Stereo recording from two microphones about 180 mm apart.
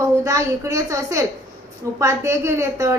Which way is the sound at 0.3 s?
15° right (ahead or behind).